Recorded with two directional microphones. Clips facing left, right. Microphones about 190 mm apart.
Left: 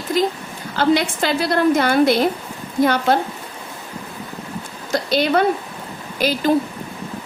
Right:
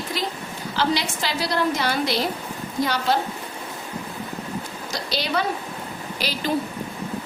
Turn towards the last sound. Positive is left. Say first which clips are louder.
# left 8 dB
turn(degrees=50)  # may be behind; listen again after turning